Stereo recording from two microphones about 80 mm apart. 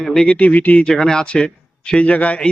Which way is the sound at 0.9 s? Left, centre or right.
Centre.